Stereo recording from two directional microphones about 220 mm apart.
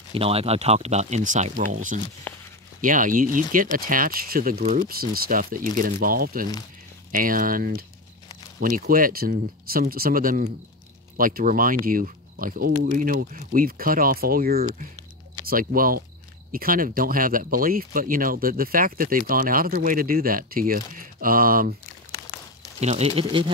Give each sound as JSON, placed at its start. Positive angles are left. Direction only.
{"t": 0.1, "sound": "speech", "side_deg": -25}
{"t": 2.3, "sound": "a sound", "side_deg": 5}
{"t": 2.8, "sound": "speech", "side_deg": -35}
{"t": 22.8, "sound": "speech", "side_deg": -30}